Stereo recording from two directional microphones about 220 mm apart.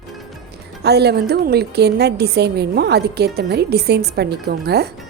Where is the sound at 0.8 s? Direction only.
50° right (ahead or behind).